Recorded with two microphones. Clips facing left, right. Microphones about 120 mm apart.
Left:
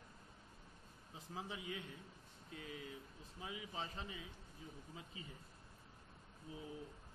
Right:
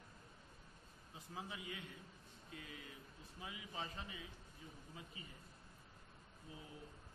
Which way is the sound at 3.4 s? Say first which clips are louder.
Left 2 dB; 25° left (ahead or behind).